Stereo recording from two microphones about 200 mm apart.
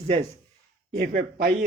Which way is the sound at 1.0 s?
45° right (ahead or behind).